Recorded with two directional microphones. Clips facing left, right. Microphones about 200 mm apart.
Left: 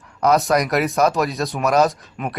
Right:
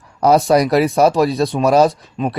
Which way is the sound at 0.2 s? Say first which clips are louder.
Right 5 dB; 30° right (ahead or behind).